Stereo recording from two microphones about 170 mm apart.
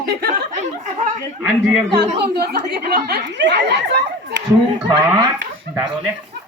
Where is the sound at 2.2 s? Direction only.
70° right (ahead or behind); by 4.4 s 90° right.